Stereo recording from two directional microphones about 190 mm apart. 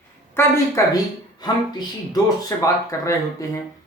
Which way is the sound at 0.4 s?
10° left (ahead or behind).